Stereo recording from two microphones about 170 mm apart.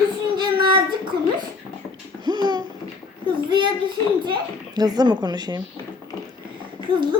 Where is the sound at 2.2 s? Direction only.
25° right (ahead or behind).